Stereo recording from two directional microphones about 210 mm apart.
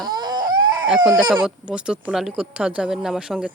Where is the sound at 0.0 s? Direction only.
20° right (ahead or behind).